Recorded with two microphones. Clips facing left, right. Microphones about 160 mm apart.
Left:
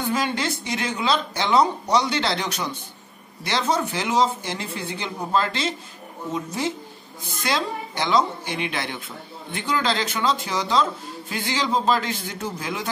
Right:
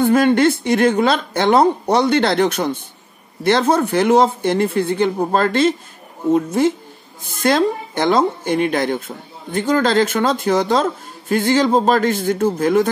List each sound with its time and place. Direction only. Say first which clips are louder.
0.0 s a woman's voice: right 12 dB; 55° right (ahead or behind)